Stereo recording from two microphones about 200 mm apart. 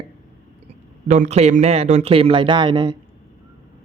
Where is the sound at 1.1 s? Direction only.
35° right (ahead or behind).